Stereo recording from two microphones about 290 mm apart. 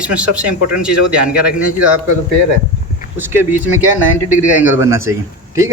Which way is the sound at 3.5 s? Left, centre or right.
Left.